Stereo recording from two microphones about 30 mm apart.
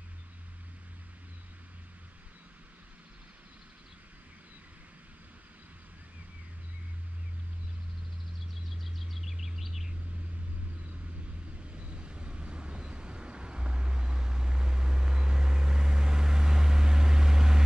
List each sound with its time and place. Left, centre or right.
8.6 s vehicle: centre
11.7 s vehicle: right